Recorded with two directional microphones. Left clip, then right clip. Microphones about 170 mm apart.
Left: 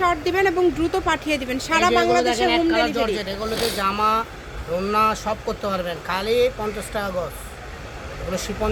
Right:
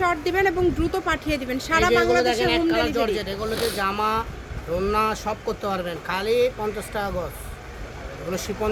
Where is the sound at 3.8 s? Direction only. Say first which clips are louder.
Left 5 dB; 30° right (ahead or behind).